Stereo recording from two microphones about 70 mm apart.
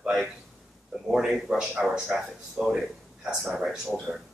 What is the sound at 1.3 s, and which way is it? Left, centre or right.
Speech, centre.